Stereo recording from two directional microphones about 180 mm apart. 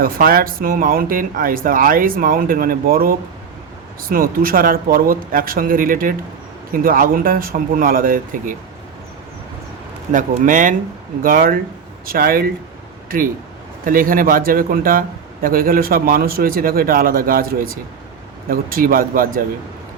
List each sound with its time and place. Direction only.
0.0 s a man's voice: 55° right (ahead or behind)
10.1 s a man's voice: 45° right (ahead or behind)